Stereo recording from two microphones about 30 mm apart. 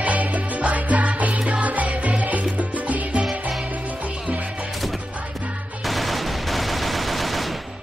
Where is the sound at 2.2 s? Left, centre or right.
Right.